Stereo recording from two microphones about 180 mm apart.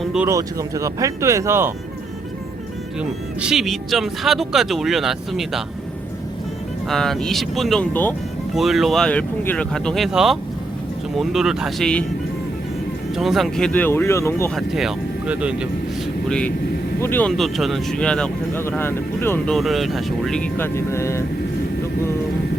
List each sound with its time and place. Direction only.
0.0 s a sound: 5° right (ahead or behind)
0.3 s speech: 20° right (ahead or behind)
3.0 s speech: 5° right (ahead or behind)
6.8 s speech: centre (ahead or behind)
13.1 s speech: centre (ahead or behind); by 14.5 s 15° left (ahead or behind)
14.5 s speech: centre (ahead or behind)
17.0 s speech: 10° left (ahead or behind)
19.5 s speech: centre (ahead or behind)